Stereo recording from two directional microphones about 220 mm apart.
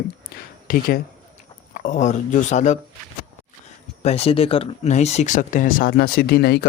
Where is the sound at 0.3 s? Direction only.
45° left (ahead or behind).